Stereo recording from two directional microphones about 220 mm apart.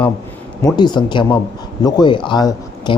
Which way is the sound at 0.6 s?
20° left (ahead or behind).